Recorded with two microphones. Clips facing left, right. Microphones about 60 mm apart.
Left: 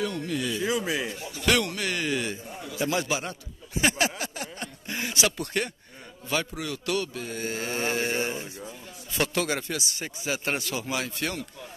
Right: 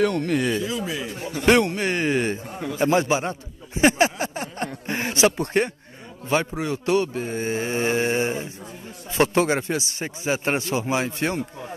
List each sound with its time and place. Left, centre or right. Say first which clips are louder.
0.0 s speech: right 8 dB; right
0.7 s speech: left 1 dB; centre
1.1 s a man's voice: right 10 dB; right